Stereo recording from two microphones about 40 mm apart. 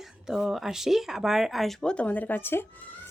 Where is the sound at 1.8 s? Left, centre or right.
Left.